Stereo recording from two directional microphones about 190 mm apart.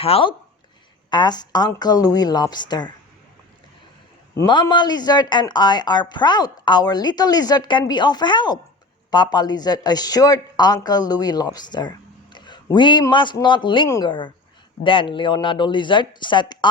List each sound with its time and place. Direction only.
0.0 s speech: 30° left (ahead or behind)
4.4 s speech: 20° left (ahead or behind)